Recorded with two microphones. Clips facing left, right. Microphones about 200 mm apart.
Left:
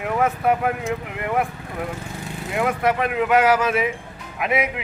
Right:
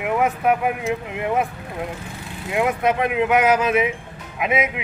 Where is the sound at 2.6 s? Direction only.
20° right (ahead or behind).